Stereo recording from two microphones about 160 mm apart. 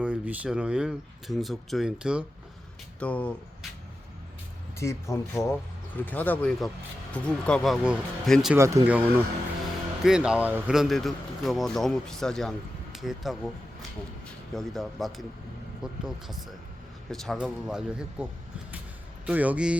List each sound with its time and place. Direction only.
0.0 s speech: 5° right (ahead or behind)
3.0 s speech: 10° left (ahead or behind)
4.8 s speech: 20° left (ahead or behind); by 8.5 s centre (ahead or behind)
8.5 s speech: 20° right (ahead or behind); by 13.5 s centre (ahead or behind)
14.5 s speech: centre (ahead or behind)